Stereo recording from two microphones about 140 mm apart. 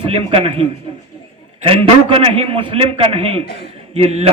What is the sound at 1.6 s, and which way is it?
A man's voice, 40° right (ahead or behind).